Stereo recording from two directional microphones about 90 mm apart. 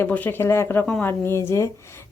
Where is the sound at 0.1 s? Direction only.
25° left (ahead or behind).